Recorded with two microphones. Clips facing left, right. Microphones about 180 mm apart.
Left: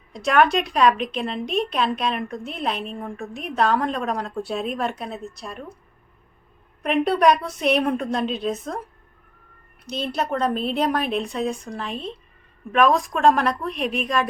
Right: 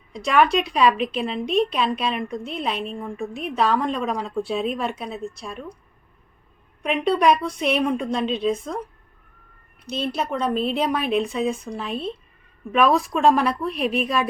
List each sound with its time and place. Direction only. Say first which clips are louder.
0.1 s a woman's voice: even; centre (ahead or behind)
6.8 s a woman's voice: left 1 dB; centre (ahead or behind)
9.8 s a woman's voice: even; centre (ahead or behind)
11.9 s speech: right 5 dB; 35° right (ahead or behind)
12.7 s a woman's voice: even; 5° right (ahead or behind)